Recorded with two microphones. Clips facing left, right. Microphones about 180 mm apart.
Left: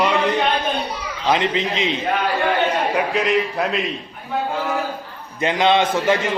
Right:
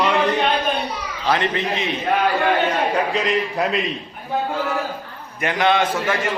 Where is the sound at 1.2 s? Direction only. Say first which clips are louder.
Left 1 dB; 20° left (ahead or behind).